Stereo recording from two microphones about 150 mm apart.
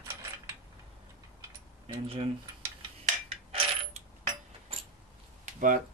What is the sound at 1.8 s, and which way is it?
Speech, 40° right (ahead or behind).